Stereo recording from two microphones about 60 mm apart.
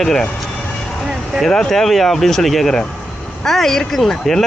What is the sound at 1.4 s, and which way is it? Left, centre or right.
Speech, centre.